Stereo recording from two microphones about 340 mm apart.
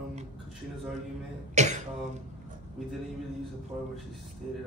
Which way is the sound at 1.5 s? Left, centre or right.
Right.